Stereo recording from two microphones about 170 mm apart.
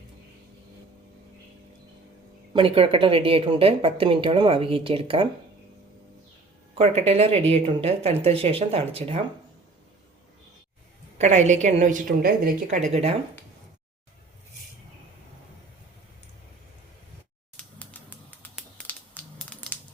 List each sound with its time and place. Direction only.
2.5 s a woman's voice: 30° right (ahead or behind)
6.7 s a woman's voice: 35° right (ahead or behind)
11.2 s a woman's voice: 45° right (ahead or behind)
12.7 s a woman's voice: 40° right (ahead or behind)
17.7 s bird: 10° left (ahead or behind)